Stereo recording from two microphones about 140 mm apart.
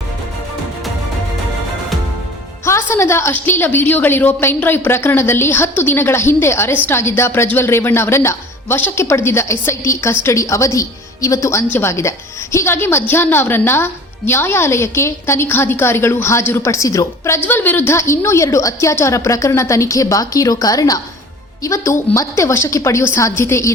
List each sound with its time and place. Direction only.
2.6 s a woman's voice: 20° left (ahead or behind)